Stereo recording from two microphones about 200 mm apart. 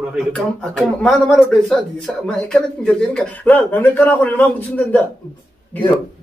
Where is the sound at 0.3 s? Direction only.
5° left (ahead or behind).